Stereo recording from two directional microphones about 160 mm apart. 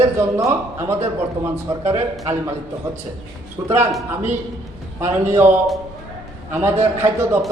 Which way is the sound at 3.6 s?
15° right (ahead or behind).